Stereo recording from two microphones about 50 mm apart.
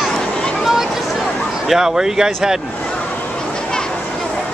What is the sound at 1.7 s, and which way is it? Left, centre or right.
Speech, centre.